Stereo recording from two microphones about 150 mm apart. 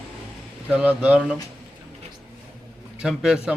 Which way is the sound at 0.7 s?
10° right (ahead or behind).